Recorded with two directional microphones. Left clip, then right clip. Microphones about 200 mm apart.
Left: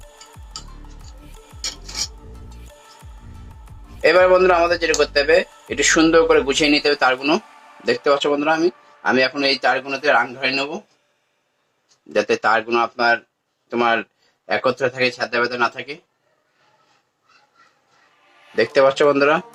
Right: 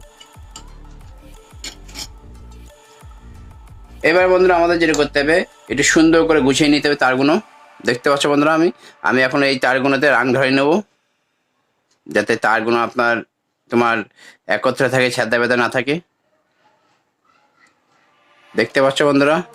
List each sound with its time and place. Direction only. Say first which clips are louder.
1.2 s music: left 4 dB; centre (ahead or behind)
4.0 s speech: even; 40° right (ahead or behind)
12.0 s speech: right 2 dB; 50° right (ahead or behind)
18.5 s speech: even; 45° right (ahead or behind)